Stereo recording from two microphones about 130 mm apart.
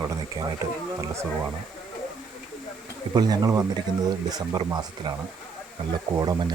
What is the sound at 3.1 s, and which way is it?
Speech, 30° right (ahead or behind).